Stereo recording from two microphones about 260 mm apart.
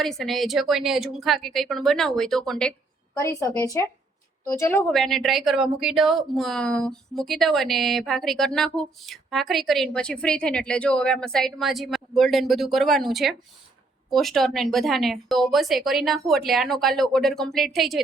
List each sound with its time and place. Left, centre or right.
0.0 s a woman's voice: centre